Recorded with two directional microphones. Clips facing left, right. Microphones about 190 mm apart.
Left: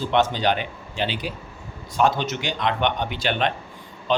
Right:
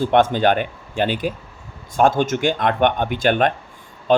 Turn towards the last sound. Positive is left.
turn(degrees=-50)  # may be behind; listen again after turning